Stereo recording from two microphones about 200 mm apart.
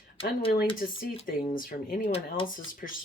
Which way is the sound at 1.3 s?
45° left (ahead or behind).